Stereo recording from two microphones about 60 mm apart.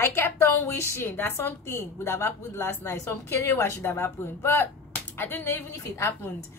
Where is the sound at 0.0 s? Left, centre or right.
Left.